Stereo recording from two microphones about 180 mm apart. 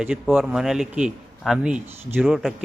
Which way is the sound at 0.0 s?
5° right (ahead or behind).